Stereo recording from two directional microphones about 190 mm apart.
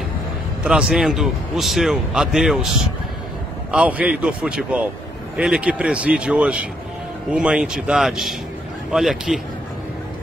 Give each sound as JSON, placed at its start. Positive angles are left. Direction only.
{"t": 0.7, "sound": "a man's voice", "side_deg": -5}